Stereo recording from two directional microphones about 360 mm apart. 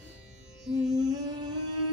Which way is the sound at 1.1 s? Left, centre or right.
Centre.